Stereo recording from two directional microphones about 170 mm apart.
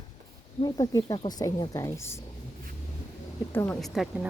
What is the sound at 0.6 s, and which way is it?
Speech, 25° left (ahead or behind).